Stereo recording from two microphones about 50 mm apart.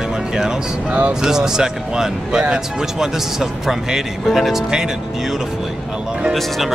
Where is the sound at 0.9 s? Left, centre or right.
Right.